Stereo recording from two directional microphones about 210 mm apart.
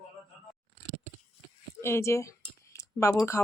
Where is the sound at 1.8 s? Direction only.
10° left (ahead or behind).